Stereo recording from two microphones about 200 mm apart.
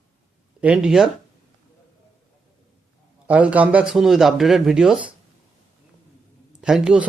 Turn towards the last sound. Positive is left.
turn(degrees=-5)  # may be behind; listen again after turning